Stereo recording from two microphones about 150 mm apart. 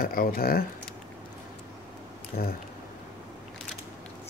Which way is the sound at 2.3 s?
90° left.